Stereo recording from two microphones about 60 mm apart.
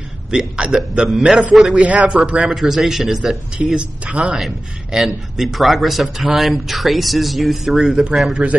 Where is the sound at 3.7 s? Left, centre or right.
Centre.